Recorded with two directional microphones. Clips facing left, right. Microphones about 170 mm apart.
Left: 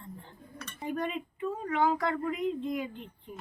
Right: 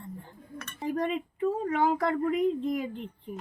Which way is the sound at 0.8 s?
30° right (ahead or behind).